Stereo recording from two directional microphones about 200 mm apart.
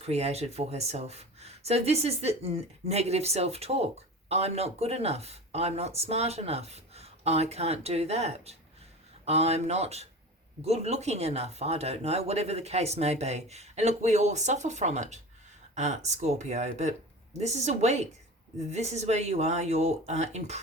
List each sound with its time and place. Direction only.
0.0 s speech: 30° right (ahead or behind)